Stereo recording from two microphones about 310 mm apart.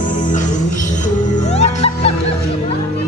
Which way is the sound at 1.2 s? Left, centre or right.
Left.